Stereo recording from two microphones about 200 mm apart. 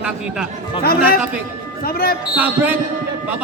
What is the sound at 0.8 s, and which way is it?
Speech, 50° left (ahead or behind).